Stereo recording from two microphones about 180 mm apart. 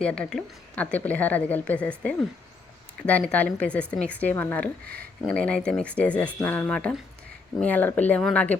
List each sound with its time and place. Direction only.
0.0 s a woman's voice: 5° left (ahead or behind)